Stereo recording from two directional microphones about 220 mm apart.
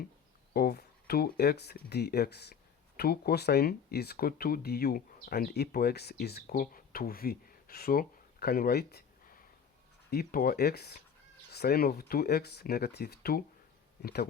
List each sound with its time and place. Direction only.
0.5 s speech: 45° left (ahead or behind)
10.1 s speech: 45° left (ahead or behind)